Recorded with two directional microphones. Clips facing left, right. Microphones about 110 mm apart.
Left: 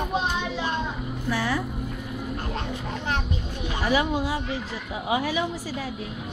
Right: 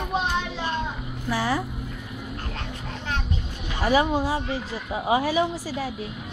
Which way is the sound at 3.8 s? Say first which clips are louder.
Right 3 dB; 40° right (ahead or behind).